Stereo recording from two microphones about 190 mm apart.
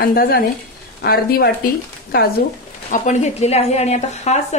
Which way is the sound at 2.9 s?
40° left (ahead or behind).